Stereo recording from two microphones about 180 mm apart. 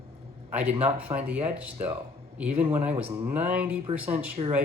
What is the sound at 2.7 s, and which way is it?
Speech, 10° right (ahead or behind).